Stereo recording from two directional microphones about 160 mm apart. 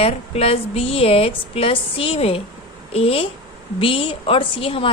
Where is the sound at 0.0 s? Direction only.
40° left (ahead or behind).